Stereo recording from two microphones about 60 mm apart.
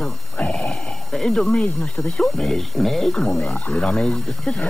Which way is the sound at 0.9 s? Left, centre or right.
Centre.